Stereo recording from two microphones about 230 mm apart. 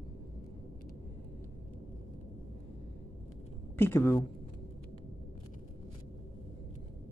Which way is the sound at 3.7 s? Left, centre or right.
Centre.